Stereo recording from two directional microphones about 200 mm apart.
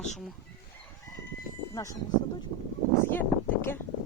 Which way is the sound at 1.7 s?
15° left (ahead or behind).